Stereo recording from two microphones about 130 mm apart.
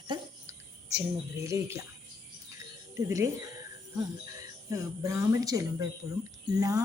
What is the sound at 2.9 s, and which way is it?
Speech, 25° right (ahead or behind).